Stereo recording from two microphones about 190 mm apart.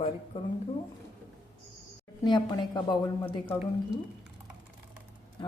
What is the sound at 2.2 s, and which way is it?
A woman's voice, 25° left (ahead or behind).